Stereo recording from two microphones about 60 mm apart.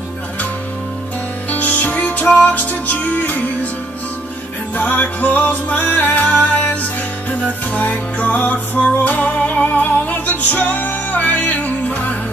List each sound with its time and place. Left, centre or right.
1.5 s music: left
4.7 s music: left